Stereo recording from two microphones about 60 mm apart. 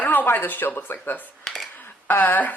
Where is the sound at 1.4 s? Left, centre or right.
Centre.